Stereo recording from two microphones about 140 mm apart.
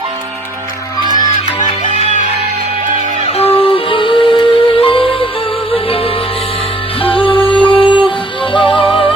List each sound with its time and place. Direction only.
1.8 s music: 60° left (ahead or behind)
3.3 s music: 45° left (ahead or behind)
7.0 s music: 40° left (ahead or behind)
7.3 s music: 10° left (ahead or behind)
7.7 s music: 35° left (ahead or behind)